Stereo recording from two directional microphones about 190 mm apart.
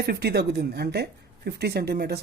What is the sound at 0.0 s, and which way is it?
Speech, 55° right (ahead or behind).